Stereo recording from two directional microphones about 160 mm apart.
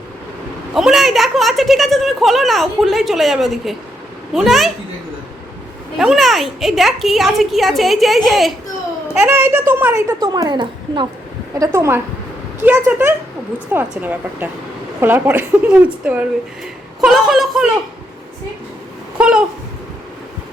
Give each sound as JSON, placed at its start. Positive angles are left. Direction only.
{"t": 0.7, "sound": "a woman's voice", "side_deg": -5}
{"t": 6.0, "sound": "a woman's voice", "side_deg": 0}
{"t": 9.2, "sound": "a woman's voice", "side_deg": -15}
{"t": 19.2, "sound": "a woman's voice", "side_deg": -5}